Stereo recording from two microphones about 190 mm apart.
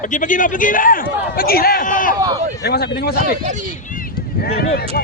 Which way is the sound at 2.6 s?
55° left (ahead or behind).